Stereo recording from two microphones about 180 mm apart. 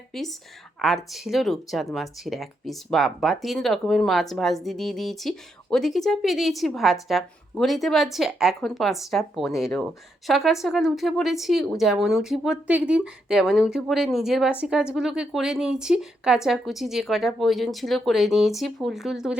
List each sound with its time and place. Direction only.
0.1 s speech: centre (ahead or behind)